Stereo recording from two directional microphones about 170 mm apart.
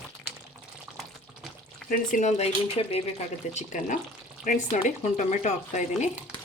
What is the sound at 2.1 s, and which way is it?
Speech, 45° left (ahead or behind).